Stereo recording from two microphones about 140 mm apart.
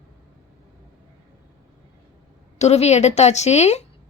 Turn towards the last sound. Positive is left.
turn(degrees=50)  # may be behind; listen again after turning